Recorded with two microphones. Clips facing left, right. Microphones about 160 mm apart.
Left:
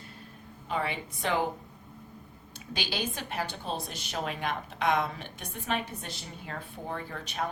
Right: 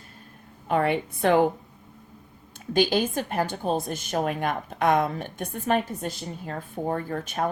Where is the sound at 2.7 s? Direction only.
50° right (ahead or behind).